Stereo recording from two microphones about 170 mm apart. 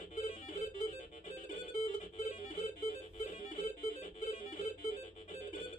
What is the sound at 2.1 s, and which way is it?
Music, 40° left (ahead or behind).